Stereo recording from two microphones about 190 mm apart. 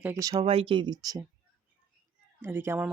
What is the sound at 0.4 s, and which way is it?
Speech, 30° right (ahead or behind).